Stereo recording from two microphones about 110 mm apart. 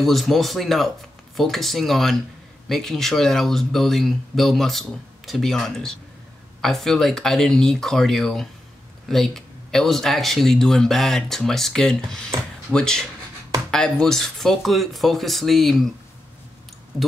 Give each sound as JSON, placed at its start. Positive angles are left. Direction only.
{"t": 0.0, "sound": "speech", "side_deg": 0}
{"t": 12.3, "sound": "speech", "side_deg": -30}
{"t": 12.7, "sound": "speech", "side_deg": 5}